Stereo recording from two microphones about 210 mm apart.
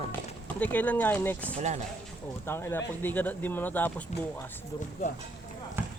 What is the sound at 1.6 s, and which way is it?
Speech, 35° right (ahead or behind).